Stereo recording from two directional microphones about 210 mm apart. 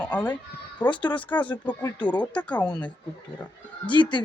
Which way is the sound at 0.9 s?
20° left (ahead or behind).